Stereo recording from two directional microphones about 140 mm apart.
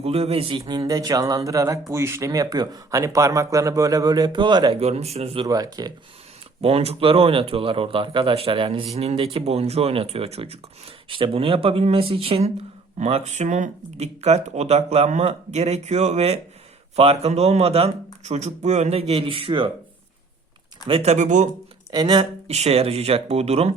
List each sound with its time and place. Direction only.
0.0 s speech: 45° right (ahead or behind)
0.9 s speech: 25° right (ahead or behind)
4.8 s speech: 50° right (ahead or behind)
5.5 s speech: 25° right (ahead or behind)
6.6 s speech: 45° right (ahead or behind)
20.8 s speech: 45° right (ahead or behind)
21.9 s speech: 30° right (ahead or behind)
22.4 s speech: 50° right (ahead or behind)